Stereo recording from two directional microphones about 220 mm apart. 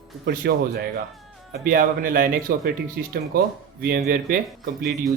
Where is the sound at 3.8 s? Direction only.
40° right (ahead or behind).